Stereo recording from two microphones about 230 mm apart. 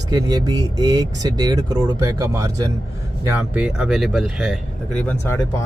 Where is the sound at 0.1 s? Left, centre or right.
Centre.